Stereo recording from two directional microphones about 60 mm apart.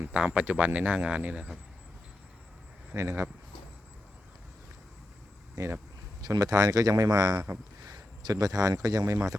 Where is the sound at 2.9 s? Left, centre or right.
Right.